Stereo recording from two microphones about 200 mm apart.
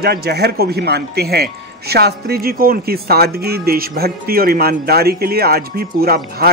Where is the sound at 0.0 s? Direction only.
50° right (ahead or behind).